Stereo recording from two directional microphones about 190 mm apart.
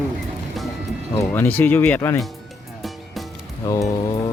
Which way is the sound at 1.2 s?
10° left (ahead or behind).